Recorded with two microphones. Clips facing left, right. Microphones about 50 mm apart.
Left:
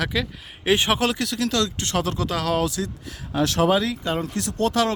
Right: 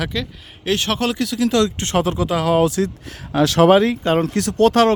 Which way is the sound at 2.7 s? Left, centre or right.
Right.